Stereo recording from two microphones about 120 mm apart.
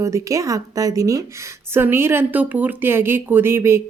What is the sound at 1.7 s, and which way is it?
A woman's voice, 20° right (ahead or behind).